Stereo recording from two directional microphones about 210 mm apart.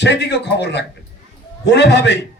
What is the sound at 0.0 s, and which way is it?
A man's voice, 55° left (ahead or behind).